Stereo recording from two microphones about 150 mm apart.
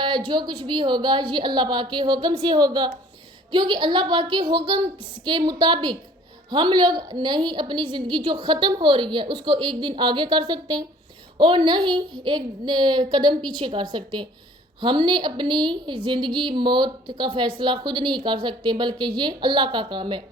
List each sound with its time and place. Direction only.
0.3 s a woman's voice: 30° right (ahead or behind)